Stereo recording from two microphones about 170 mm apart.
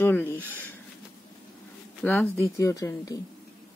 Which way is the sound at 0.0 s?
10° left (ahead or behind).